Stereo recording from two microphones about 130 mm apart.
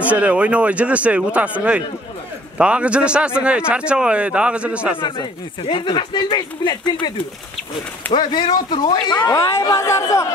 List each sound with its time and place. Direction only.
0.1 s speech: 10° right (ahead or behind)
4.9 s speech: 35° left (ahead or behind); by 10.2 s 20° left (ahead or behind)